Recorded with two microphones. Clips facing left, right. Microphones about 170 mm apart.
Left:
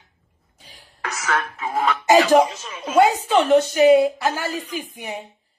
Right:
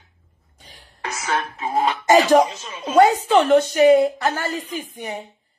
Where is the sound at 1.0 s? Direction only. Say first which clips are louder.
Even; 25° right (ahead or behind).